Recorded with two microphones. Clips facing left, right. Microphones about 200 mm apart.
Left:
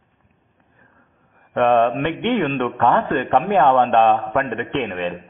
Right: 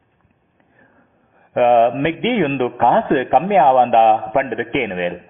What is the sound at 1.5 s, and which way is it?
A man's voice, 15° right (ahead or behind).